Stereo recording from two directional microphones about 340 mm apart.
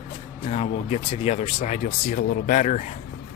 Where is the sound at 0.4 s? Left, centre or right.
Centre.